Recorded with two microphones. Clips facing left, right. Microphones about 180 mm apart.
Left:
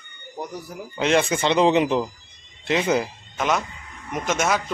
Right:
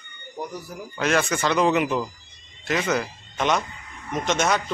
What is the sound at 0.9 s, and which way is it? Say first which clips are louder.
Speech: left 3 dB; 25° left (ahead or behind).